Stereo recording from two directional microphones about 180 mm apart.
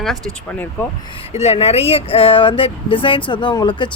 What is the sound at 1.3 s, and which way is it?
Speech, 35° left (ahead or behind).